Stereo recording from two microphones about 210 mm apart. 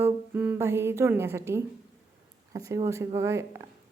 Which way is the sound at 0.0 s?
10° right (ahead or behind).